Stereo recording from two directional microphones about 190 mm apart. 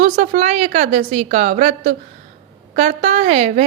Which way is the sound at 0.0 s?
35° right (ahead or behind).